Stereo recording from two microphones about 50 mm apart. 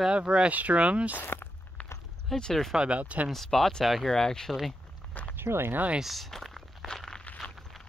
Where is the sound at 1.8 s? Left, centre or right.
Left.